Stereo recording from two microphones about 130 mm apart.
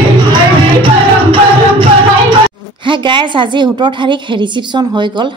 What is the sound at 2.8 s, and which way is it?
A woman's voice, 40° right (ahead or behind).